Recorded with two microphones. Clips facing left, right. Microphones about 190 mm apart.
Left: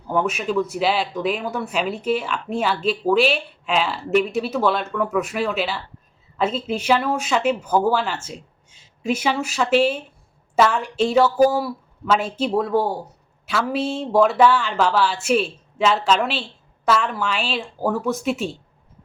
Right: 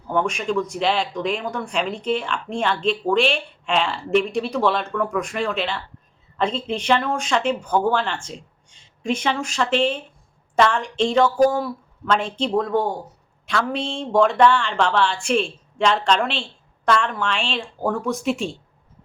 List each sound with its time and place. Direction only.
0.1 s speech: 5° left (ahead or behind)